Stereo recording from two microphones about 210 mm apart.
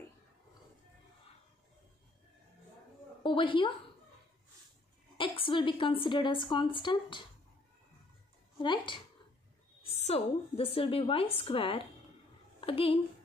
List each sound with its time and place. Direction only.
3.3 s a woman's voice: 25° left (ahead or behind)
5.1 s a woman's voice: 25° left (ahead or behind)
8.5 s a woman's voice: 20° left (ahead or behind)